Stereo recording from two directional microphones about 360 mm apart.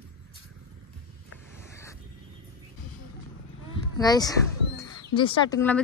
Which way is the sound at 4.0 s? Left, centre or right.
Centre.